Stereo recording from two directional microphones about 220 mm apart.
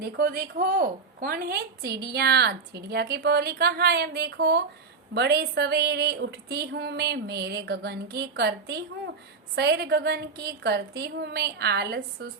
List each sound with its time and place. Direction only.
0.0 s a woman's voice: 45° right (ahead or behind)